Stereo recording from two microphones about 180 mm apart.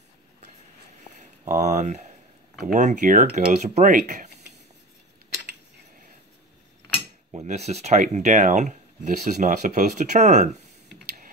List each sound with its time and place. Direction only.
1.4 s speech: 40° right (ahead or behind)
7.3 s speech: 40° right (ahead or behind)